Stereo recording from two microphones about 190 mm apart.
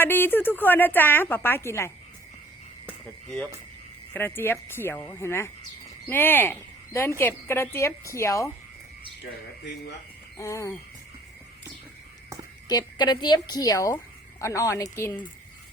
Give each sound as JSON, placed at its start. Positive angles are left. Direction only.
{"t": 0.0, "sound": "a woman's voice", "side_deg": 10}
{"t": 4.1, "sound": "a woman's voice", "side_deg": 10}
{"t": 10.3, "sound": "a woman's voice", "side_deg": 15}
{"t": 12.6, "sound": "a woman's voice", "side_deg": 20}